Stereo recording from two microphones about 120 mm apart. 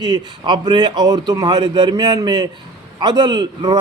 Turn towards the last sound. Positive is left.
turn(degrees=-35)  # may be behind; listen again after turning